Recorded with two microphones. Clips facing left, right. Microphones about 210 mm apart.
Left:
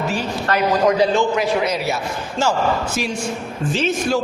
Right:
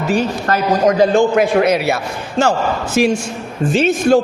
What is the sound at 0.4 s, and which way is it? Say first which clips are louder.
A man's voice: even; 45° right (ahead or behind).